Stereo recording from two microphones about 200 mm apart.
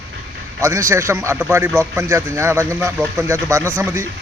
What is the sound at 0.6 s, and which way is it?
A man's voice, 15° right (ahead or behind).